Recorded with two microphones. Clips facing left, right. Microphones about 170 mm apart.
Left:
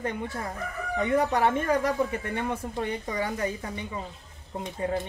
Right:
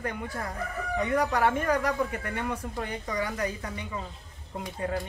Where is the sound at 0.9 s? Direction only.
25° left (ahead or behind).